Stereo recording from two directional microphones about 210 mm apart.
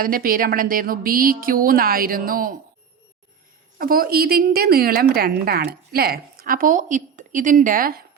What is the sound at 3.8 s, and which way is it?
A woman's voice, 45° right (ahead or behind).